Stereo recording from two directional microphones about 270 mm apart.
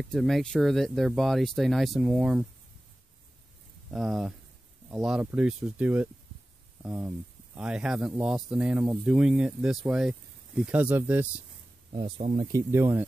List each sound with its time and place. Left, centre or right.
0.1 s speech: centre
3.9 s speech: centre
11.9 s speech: right
12.5 s speech: centre